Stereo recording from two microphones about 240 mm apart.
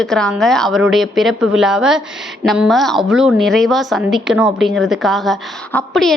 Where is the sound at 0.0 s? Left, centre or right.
Centre.